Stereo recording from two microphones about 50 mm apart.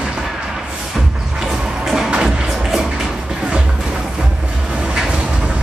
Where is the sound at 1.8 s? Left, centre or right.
Centre.